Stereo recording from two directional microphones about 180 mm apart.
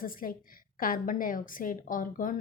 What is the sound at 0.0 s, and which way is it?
A woman's voice, 50° left (ahead or behind).